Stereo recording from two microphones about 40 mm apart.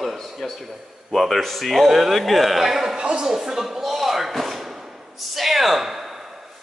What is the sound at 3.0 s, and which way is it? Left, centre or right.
Speech, right.